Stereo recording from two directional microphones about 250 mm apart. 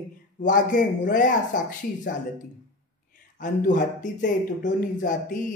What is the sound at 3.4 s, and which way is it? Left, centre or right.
Speech, left.